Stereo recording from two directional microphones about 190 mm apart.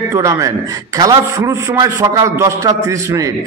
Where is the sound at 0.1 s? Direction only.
15° right (ahead or behind).